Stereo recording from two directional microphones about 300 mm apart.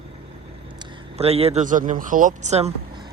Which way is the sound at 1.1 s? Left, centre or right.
Centre.